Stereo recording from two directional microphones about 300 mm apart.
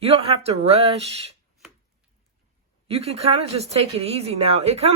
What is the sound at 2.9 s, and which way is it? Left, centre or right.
Speech, centre.